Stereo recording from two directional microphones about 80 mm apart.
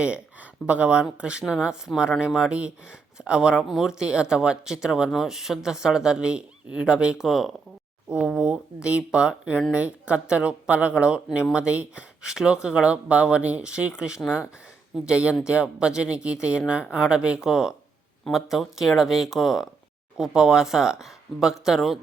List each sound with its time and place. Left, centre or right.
0.0 s speech: centre